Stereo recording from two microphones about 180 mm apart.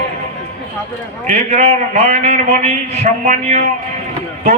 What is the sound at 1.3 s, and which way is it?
A man's voice, 40° right (ahead or behind).